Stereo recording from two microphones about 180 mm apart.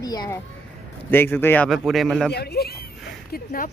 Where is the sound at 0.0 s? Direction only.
20° left (ahead or behind).